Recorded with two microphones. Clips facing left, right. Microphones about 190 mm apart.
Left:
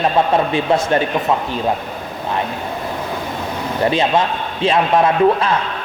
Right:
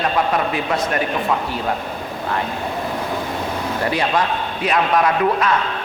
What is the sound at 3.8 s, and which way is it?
A man's voice, 25° left (ahead or behind).